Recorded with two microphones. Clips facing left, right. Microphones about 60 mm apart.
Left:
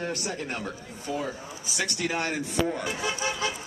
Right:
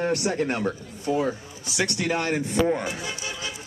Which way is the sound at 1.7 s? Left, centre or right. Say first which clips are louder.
Right 5 dB; right.